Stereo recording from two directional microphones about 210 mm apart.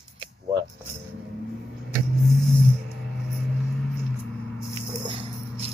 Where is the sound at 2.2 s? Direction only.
Centre (ahead or behind).